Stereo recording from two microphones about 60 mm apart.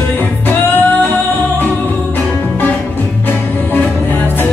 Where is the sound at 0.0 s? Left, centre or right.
Left.